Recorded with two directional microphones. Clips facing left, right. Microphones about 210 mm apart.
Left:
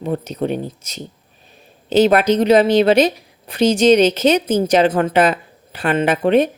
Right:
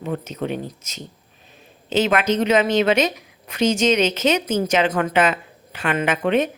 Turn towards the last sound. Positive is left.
turn(degrees=35)  # may be behind; listen again after turning